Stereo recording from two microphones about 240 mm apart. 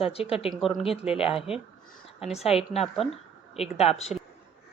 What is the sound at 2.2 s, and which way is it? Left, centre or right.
Speech, left.